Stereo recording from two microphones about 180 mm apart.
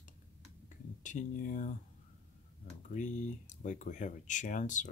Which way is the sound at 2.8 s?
40° left (ahead or behind).